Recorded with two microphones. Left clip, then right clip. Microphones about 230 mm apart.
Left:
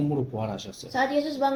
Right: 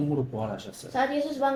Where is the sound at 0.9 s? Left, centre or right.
Left.